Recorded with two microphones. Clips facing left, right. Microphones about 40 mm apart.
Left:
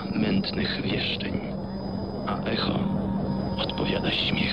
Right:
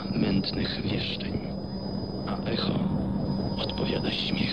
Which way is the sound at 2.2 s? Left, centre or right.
Left.